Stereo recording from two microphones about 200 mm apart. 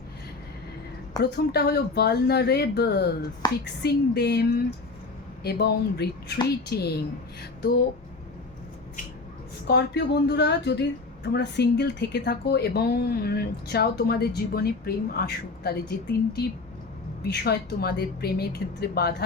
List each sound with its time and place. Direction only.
1.2 s speech: 50° left (ahead or behind)
9.6 s speech: 55° left (ahead or behind)